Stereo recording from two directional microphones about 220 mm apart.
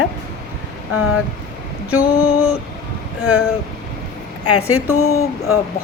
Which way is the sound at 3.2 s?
75° left (ahead or behind).